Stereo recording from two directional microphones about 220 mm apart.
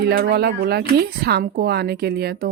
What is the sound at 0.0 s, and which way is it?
Speech, 45° right (ahead or behind).